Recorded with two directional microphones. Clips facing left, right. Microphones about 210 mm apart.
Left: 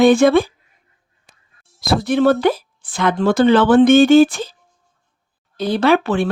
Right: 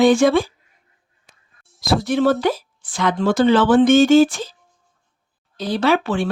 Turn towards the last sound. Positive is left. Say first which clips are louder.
# left 3 dB
turn(degrees=60)  # may be behind; listen again after turning